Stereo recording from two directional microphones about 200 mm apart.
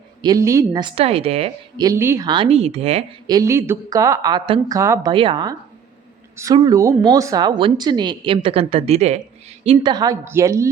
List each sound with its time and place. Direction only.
0.2 s speech: 20° right (ahead or behind)
1.8 s speech: 15° right (ahead or behind); by 3.0 s 30° right (ahead or behind)
3.2 s speech: 15° right (ahead or behind)
5.1 s speech: 25° right (ahead or behind)
9.6 s speech: 20° right (ahead or behind)